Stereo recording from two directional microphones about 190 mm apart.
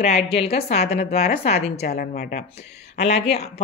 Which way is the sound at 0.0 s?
35° left (ahead or behind).